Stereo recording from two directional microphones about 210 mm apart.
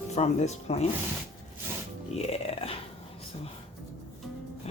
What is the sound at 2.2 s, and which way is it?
Speech, 25° left (ahead or behind).